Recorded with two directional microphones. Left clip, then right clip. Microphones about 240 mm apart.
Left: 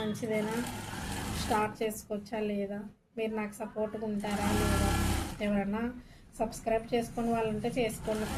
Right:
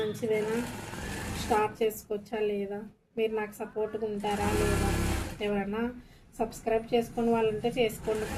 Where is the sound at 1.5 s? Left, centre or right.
Right.